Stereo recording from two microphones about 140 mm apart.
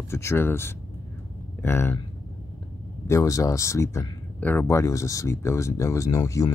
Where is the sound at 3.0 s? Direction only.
20° left (ahead or behind).